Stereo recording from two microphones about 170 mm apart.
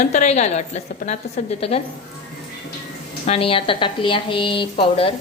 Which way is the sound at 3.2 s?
35° left (ahead or behind).